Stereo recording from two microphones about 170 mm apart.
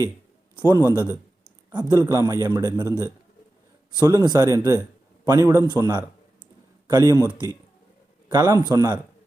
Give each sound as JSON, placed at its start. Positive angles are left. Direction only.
{"t": 0.7, "sound": "a man's voice", "side_deg": -20}
{"t": 4.0, "sound": "a man's voice", "side_deg": -20}